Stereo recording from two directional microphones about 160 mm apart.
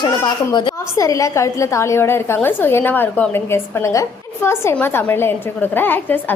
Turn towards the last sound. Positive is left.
turn(degrees=10)  # may be behind; listen again after turning